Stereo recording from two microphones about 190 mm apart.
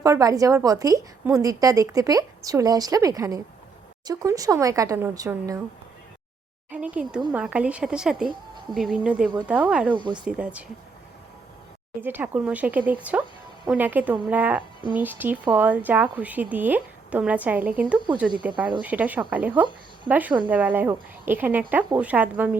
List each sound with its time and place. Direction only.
0.0 s a woman's voice: 20° right (ahead or behind)
6.7 s a woman's voice: 5° right (ahead or behind)
9.9 s a woman's voice: 25° right (ahead or behind)
10.2 s a woman's voice: 5° right (ahead or behind)
11.9 s a woman's voice: 10° right (ahead or behind)